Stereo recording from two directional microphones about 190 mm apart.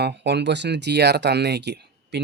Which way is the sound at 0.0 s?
65° right (ahead or behind).